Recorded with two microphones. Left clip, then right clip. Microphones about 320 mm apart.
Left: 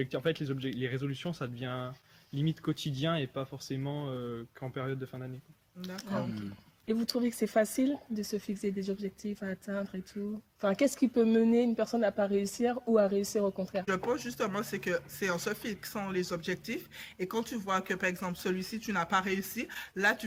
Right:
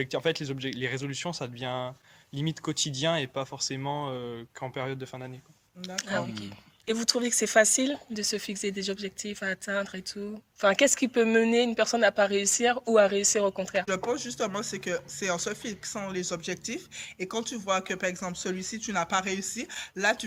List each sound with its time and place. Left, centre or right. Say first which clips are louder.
0.0 s speech: right 4 dB; centre
6.0 s speech: right 6 dB; right
12.7 s speech: right 5 dB; right
13.8 s speech: right 3 dB; centre